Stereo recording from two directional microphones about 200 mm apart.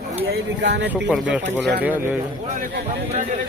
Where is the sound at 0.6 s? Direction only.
60° right (ahead or behind).